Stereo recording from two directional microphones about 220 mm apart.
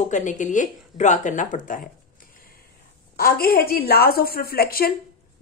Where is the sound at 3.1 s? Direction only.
45° left (ahead or behind).